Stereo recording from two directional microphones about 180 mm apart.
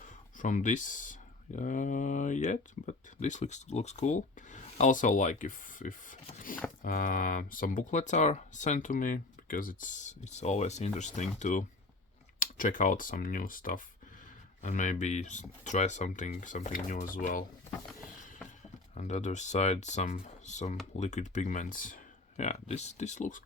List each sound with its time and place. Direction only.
0.0 s speech: 45° left (ahead or behind)
18.9 s speech: 40° left (ahead or behind)